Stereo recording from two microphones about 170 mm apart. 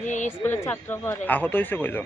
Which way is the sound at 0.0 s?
45° left (ahead or behind).